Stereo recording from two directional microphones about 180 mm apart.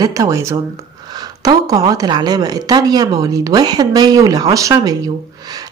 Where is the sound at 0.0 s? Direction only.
20° right (ahead or behind).